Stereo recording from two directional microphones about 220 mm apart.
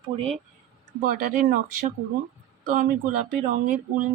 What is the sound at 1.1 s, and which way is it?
Speech, 40° right (ahead or behind).